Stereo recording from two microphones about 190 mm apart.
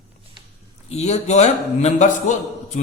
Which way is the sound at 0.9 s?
35° left (ahead or behind).